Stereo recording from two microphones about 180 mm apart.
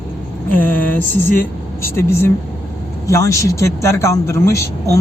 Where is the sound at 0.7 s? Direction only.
10° left (ahead or behind).